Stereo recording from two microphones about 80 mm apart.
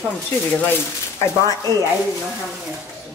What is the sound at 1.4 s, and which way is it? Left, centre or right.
Speech, right.